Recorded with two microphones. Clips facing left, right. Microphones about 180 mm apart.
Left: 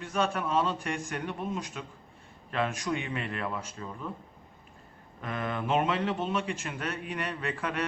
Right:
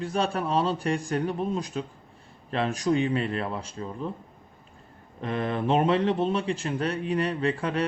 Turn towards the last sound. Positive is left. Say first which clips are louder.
# right 6 dB
turn(degrees=-30)  # may be behind; listen again after turning